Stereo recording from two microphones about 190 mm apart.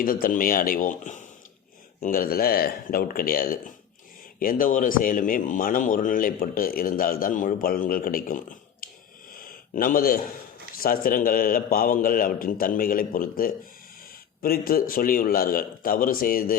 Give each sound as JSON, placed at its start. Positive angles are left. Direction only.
{"t": 0.0, "sound": "speech", "side_deg": 50}
{"t": 9.3, "sound": "a sound", "side_deg": 50}
{"t": 10.8, "sound": "speech", "side_deg": 50}